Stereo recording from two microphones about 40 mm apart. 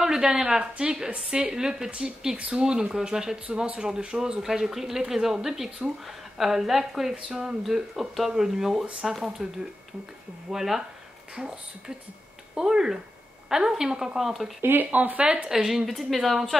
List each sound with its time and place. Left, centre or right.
0.0 s a woman's voice: centre
1.9 s speech: right
2.6 s a woman's voice: right
4.4 s speech: centre
12.5 s speech: centre
14.6 s speech: right
14.9 s speech: right
15.3 s speech: centre
16.1 s speech: centre